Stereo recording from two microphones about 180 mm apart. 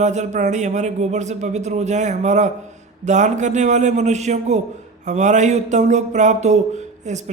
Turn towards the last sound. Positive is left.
turn(degrees=-40)  # may be behind; listen again after turning